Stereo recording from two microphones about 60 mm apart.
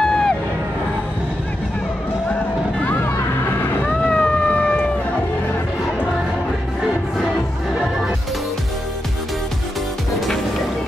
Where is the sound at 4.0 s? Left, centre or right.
Centre.